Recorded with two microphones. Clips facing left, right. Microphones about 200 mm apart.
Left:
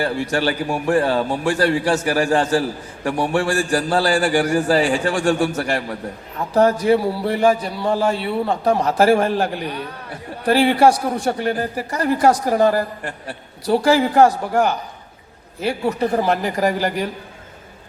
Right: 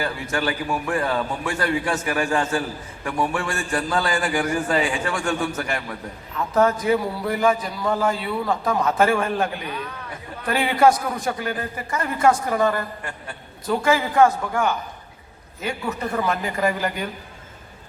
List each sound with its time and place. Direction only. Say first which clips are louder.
0.3 s a man's voice: left 4 dB; 30° left (ahead or behind)